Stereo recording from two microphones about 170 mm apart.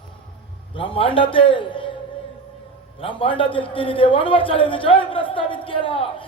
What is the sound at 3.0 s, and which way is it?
A man's voice, 30° left (ahead or behind).